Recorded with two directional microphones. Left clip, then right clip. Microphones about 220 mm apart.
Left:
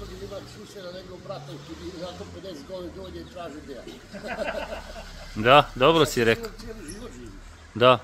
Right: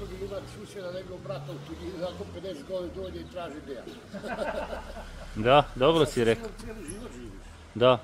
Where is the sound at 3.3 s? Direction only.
20° right (ahead or behind).